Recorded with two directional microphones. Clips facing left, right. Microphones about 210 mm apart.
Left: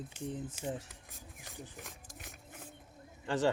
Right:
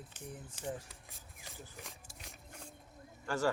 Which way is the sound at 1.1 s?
Centre (ahead or behind).